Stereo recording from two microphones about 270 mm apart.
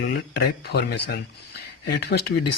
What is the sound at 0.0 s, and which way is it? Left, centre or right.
Speech, left.